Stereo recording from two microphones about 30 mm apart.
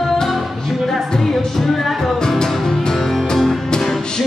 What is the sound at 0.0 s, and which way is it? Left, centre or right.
Music, centre.